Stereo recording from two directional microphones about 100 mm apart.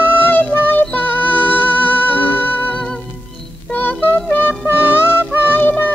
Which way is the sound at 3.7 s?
20° left (ahead or behind).